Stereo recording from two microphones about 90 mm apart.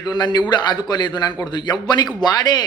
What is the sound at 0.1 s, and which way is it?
A man's voice, 55° left (ahead or behind).